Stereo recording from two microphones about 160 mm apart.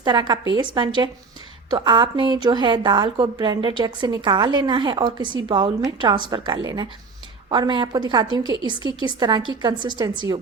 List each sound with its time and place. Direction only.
0.0 s a woman's voice: 30° right (ahead or behind)